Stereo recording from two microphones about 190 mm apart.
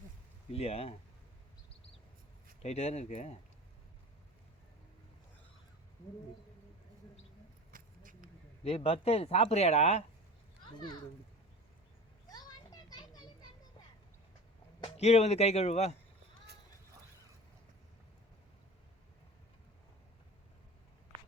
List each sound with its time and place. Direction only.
0.5 s speech: 30° left (ahead or behind)
2.6 s speech: 35° left (ahead or behind)
7.7 s a sound: 45° right (ahead or behind)
8.6 s speech: 30° left (ahead or behind)
12.3 s a sound: 20° left (ahead or behind)
14.8 s speech: 35° left (ahead or behind)